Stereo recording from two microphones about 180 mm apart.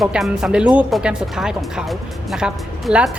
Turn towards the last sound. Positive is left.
turn(degrees=-5)  # may be behind; listen again after turning